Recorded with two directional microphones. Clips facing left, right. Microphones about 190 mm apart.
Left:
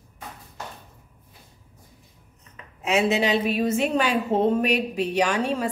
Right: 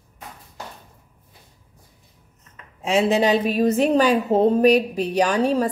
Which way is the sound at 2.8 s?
30° right (ahead or behind).